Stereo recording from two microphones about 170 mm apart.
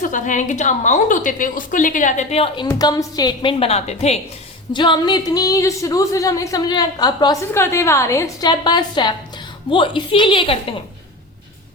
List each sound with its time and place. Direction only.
0.0 s a woman's voice: 50° left (ahead or behind)
4.7 s a woman's voice: 25° left (ahead or behind)